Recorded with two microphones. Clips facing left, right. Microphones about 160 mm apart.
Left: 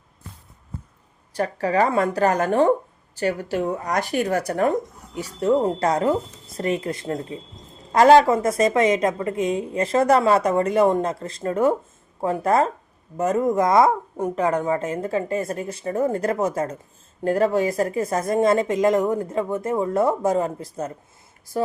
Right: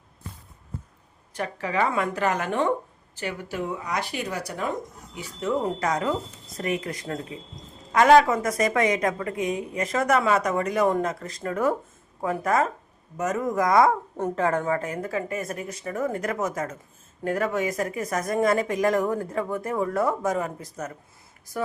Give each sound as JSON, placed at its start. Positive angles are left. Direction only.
{"t": 1.3, "sound": "speech", "side_deg": 35}
{"t": 5.1, "sound": "a woman's voice", "side_deg": 35}